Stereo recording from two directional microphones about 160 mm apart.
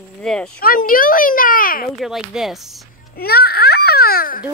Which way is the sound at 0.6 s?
60° left (ahead or behind).